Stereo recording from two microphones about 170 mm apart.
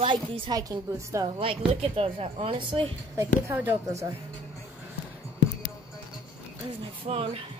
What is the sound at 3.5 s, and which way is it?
Speech, 15° right (ahead or behind).